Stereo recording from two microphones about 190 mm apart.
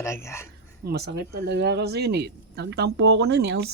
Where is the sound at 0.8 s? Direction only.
55° right (ahead or behind).